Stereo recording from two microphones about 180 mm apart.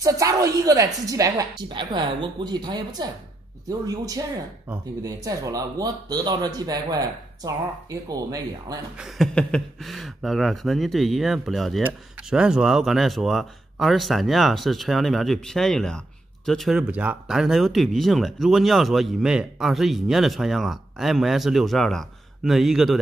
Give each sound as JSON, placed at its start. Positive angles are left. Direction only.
{"t": 0.0, "sound": "speech", "side_deg": -20}
{"t": 8.9, "sound": "speech", "side_deg": 0}